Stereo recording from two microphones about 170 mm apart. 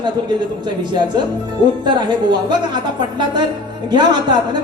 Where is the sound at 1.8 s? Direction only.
25° right (ahead or behind).